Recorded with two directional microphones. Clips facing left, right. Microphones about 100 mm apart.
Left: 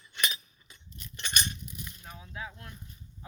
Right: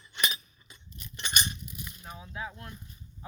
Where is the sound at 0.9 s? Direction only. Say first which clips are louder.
Right 1 dB; 10° right (ahead or behind).